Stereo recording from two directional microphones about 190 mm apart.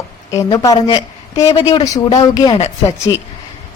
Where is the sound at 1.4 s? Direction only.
30° left (ahead or behind).